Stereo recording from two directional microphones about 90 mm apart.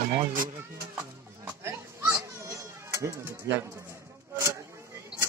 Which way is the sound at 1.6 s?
35° right (ahead or behind).